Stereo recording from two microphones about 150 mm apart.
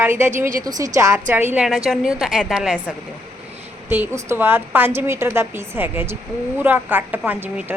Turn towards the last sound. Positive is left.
turn(degrees=-10)  # may be behind; listen again after turning